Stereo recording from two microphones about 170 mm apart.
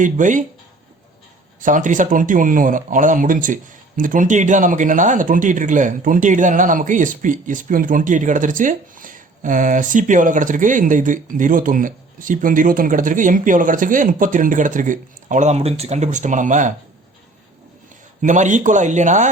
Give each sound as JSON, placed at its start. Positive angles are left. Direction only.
{"t": 0.0, "sound": "speech", "side_deg": -50}
{"t": 1.6, "sound": "speech", "side_deg": -50}
{"t": 18.2, "sound": "speech", "side_deg": -45}